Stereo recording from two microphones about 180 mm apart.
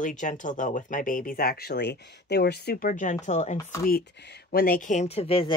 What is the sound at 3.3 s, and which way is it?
Chopping, 40° left (ahead or behind).